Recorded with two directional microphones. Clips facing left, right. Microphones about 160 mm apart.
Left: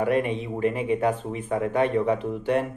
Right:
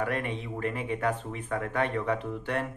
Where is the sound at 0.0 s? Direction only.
20° left (ahead or behind).